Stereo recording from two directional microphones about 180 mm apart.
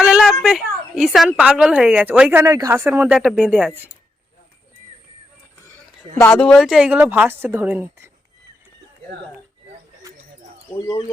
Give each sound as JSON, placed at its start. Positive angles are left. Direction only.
{"t": 0.2, "sound": "a woman's voice", "side_deg": 0}
{"t": 6.3, "sound": "a woman's voice", "side_deg": 5}
{"t": 10.8, "sound": "speech", "side_deg": 25}